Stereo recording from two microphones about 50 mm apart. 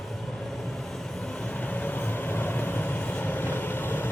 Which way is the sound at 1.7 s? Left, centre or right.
Left.